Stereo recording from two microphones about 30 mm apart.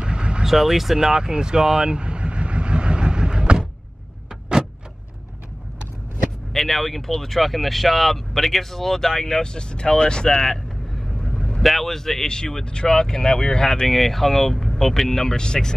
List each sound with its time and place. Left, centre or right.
0.0 s vehicle: right
0.5 s speech: centre
0.9 s speech: right
1.8 s vehicle: right
6.5 s speech: centre; by 10.6 s left
11.1 s vehicle: left
11.6 s speech: centre
11.9 s speech: centre
13.8 s speech: centre; by 15.7 s left